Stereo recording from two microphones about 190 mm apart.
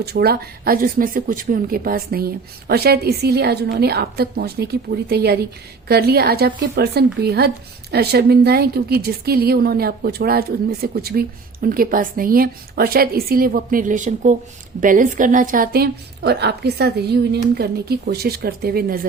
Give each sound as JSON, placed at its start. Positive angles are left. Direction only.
{"t": 0.0, "sound": "speech", "side_deg": -55}